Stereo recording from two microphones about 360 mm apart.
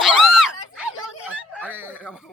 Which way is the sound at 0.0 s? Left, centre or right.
Centre.